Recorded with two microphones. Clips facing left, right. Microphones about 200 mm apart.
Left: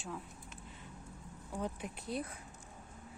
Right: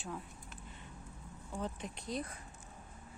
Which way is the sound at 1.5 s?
10° left (ahead or behind).